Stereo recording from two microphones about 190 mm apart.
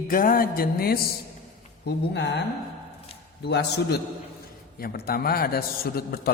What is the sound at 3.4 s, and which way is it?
A man's voice, 60° left (ahead or behind).